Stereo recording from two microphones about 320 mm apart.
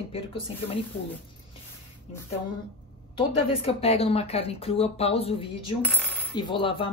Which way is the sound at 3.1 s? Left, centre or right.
Centre.